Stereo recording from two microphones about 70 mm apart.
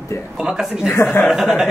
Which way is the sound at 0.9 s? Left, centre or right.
Left.